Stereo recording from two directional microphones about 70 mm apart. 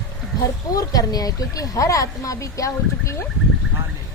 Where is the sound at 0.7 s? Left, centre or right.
Left.